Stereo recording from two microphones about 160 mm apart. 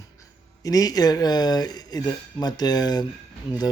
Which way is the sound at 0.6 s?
25° left (ahead or behind).